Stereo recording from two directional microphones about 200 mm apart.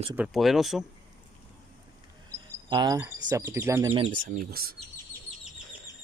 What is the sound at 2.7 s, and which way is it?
Speech, 20° right (ahead or behind).